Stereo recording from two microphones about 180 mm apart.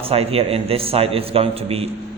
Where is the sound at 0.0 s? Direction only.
35° right (ahead or behind).